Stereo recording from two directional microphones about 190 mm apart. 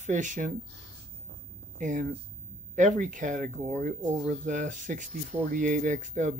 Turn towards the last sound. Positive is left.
turn(degrees=-40)  # may be behind; listen again after turning